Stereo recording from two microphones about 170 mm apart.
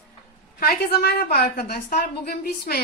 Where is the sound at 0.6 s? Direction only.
65° left (ahead or behind).